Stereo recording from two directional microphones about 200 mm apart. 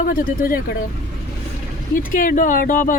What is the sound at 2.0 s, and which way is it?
Speech, 45° left (ahead or behind).